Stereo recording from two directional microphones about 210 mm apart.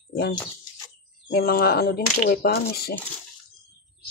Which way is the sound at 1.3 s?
45° left (ahead or behind).